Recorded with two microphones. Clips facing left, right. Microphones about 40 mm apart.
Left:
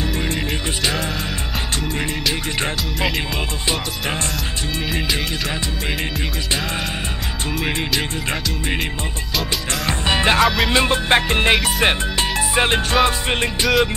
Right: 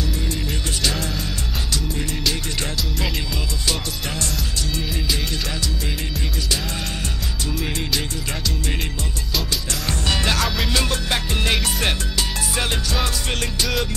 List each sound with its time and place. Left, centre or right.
9.8 s music: left
10.4 s music: centre
10.7 s music: left
11.5 s music: left